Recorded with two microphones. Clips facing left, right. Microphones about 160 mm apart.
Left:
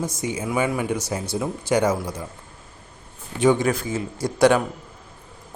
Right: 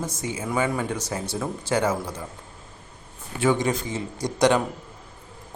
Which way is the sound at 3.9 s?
15° right (ahead or behind).